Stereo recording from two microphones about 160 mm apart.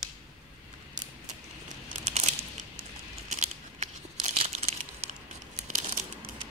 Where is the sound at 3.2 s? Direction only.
45° right (ahead or behind).